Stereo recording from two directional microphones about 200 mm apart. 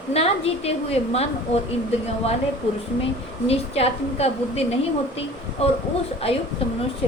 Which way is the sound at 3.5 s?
30° left (ahead or behind).